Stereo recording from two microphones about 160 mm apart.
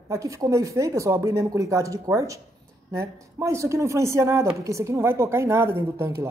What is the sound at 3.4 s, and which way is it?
A woman's voice, 15° right (ahead or behind).